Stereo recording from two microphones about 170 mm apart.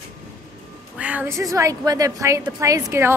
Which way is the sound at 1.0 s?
10° right (ahead or behind).